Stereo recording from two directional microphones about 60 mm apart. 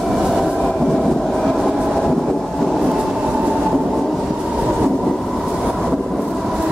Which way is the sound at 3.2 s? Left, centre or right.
Centre.